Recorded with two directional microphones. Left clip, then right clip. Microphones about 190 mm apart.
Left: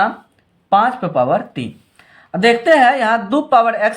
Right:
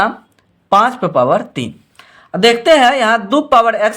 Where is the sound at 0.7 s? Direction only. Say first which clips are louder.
Right 3 dB; 35° right (ahead or behind).